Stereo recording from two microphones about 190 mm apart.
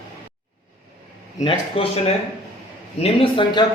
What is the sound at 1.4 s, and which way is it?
A man's voice, 25° left (ahead or behind).